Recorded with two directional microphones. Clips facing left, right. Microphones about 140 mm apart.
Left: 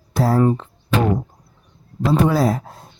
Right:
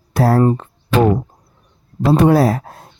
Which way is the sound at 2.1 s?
65° right (ahead or behind).